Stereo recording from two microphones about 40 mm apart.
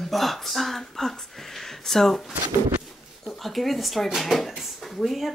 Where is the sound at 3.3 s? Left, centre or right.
Centre.